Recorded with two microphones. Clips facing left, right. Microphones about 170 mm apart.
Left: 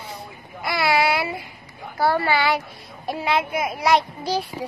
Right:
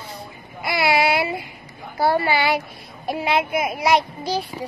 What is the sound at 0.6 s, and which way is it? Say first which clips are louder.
A child's voice: right 1 dB; 10° right (ahead or behind).